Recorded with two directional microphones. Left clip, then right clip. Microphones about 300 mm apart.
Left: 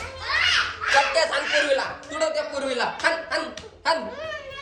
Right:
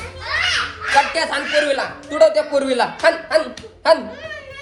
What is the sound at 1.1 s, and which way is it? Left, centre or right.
A man's voice, centre.